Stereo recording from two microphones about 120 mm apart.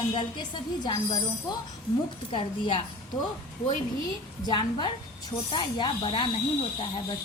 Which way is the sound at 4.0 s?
35° left (ahead or behind).